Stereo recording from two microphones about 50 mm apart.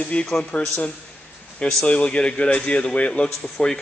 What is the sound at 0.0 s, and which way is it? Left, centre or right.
A man's voice, left.